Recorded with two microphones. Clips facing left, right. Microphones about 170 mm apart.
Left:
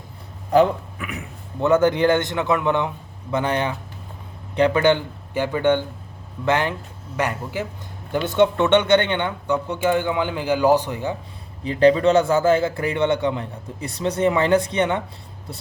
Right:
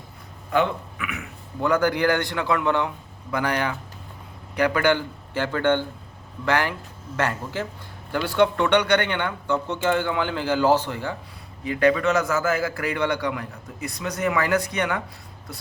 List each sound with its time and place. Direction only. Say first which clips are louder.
0.5 s speech: left 6 dB; 35° left (ahead or behind)
1.6 s a man's voice: left 4 dB; 25° left (ahead or behind)
11.6 s a man's voice: left 5 dB; 30° left (ahead or behind)